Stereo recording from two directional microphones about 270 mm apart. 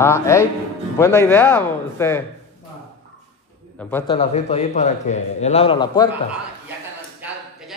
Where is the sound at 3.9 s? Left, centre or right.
Centre.